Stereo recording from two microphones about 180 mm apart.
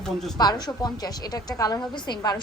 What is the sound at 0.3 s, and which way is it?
A woman's voice, 20° left (ahead or behind).